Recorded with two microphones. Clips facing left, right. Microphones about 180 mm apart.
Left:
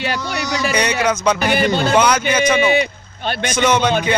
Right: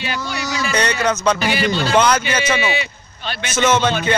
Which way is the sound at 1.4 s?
55° left (ahead or behind).